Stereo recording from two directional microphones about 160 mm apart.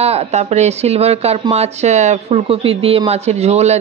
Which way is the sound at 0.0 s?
40° right (ahead or behind).